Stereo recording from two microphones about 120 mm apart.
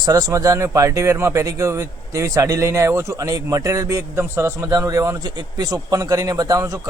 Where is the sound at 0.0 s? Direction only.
30° right (ahead or behind).